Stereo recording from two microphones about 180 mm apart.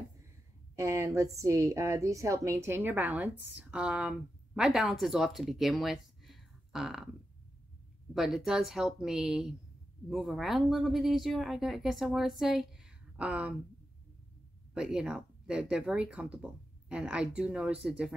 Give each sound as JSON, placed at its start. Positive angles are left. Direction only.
{"t": 0.7, "sound": "a woman's voice", "side_deg": -15}
{"t": 8.1, "sound": "speech", "side_deg": 0}
{"t": 14.7, "sound": "speech", "side_deg": -5}